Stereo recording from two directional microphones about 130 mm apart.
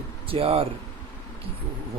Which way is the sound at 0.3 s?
45° right (ahead or behind).